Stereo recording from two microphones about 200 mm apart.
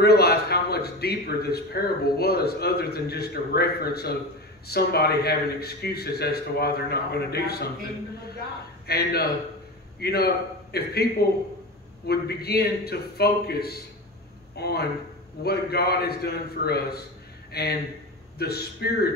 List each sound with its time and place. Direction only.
0.0 s a man's voice: 50° left (ahead or behind)
8.8 s a man's voice: 50° left (ahead or behind)
12.1 s a man's voice: 50° left (ahead or behind)